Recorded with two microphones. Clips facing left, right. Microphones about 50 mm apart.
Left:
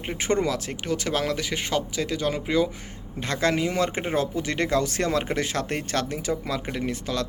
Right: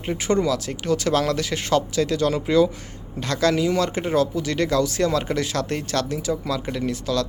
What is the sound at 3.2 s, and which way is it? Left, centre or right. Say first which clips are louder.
Speech: right 3 dB; left.